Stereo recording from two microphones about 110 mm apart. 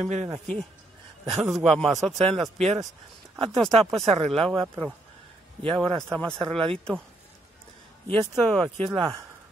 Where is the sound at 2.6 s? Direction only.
80° right.